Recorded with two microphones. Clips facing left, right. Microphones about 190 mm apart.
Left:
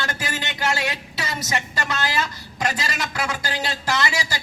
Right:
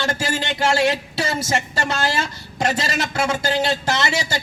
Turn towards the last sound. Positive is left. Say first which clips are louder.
# right 2 dB
turn(degrees=-25)  # may be behind; listen again after turning